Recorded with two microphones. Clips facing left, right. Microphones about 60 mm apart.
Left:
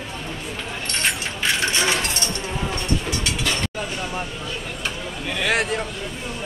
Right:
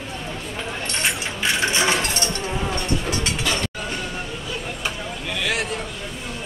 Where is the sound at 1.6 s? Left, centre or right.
Right.